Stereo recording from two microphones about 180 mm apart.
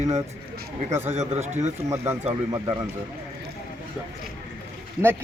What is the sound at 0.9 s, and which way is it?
Speech, 15° right (ahead or behind).